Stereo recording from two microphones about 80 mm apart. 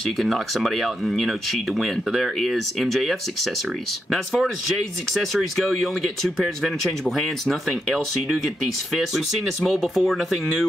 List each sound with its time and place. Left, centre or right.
0.2 s speech: centre